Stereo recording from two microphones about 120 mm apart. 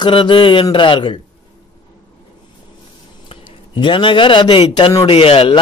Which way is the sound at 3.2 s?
45° left (ahead or behind).